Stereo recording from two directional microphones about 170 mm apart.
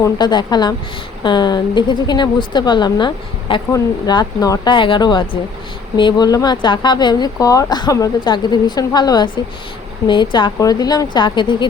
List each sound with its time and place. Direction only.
0.0 s speech: 25° left (ahead or behind)